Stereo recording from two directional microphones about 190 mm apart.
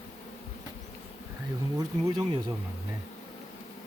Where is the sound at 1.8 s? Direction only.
20° right (ahead or behind).